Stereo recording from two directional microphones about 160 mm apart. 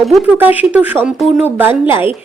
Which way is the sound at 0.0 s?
Centre (ahead or behind).